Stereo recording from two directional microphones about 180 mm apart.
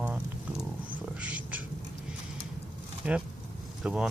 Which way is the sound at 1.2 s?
5° right (ahead or behind).